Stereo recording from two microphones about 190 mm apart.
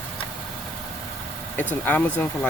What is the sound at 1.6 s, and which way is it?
Speech, 10° left (ahead or behind).